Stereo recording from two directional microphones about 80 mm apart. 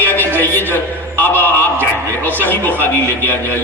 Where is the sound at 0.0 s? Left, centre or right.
Left.